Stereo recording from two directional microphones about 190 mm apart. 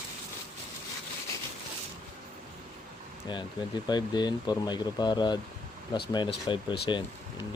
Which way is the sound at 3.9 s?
20° left (ahead or behind).